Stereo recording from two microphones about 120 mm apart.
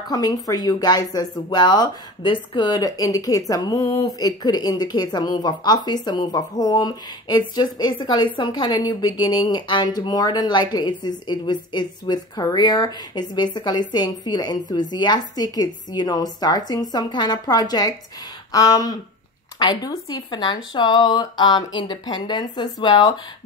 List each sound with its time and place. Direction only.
0.1 s speech: 35° left (ahead or behind)